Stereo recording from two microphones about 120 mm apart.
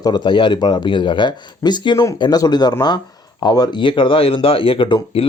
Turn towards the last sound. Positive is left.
turn(degrees=50)  # may be behind; listen again after turning